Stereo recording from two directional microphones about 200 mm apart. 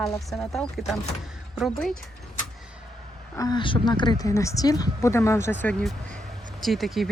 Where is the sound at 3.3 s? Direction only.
20° left (ahead or behind).